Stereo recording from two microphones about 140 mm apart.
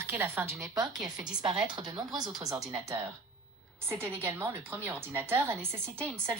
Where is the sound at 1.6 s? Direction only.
30° right (ahead or behind).